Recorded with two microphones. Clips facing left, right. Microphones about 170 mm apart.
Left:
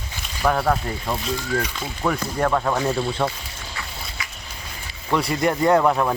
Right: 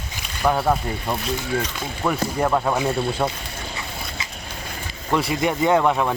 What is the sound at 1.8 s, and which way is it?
Speech, 5° right (ahead or behind).